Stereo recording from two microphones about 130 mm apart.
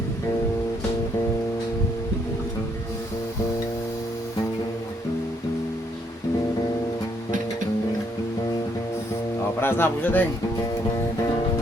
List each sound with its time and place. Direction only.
9.6 s a man's voice: 15° left (ahead or behind)